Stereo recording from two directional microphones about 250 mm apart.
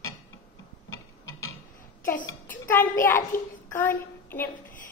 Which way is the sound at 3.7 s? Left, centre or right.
Centre.